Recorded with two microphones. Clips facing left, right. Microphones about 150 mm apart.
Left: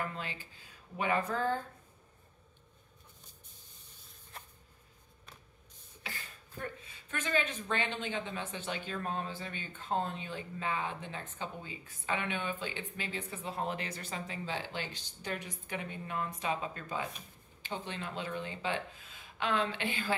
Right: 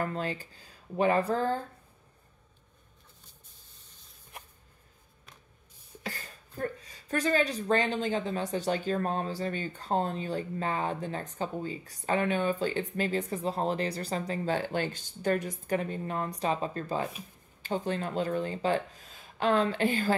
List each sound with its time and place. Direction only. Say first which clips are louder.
0.0 s speech: right 7 dB; 40° right (ahead or behind)
6.0 s speech: right 6 dB; 40° right (ahead or behind)